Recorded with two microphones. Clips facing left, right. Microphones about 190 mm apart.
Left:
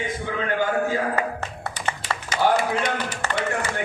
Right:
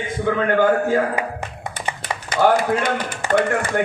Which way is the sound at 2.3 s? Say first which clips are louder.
Right 4 dB; 55° right (ahead or behind).